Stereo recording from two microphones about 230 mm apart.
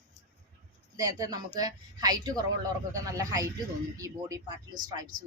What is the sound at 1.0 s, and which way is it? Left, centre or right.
Speech, centre.